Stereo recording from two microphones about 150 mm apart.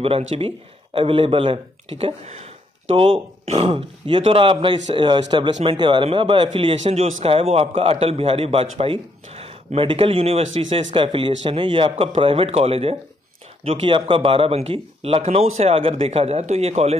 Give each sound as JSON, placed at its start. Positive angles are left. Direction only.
{"t": 0.0, "sound": "speech", "side_deg": -40}